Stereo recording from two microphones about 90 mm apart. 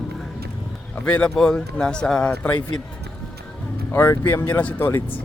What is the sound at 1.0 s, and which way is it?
Speech, 15° left (ahead or behind).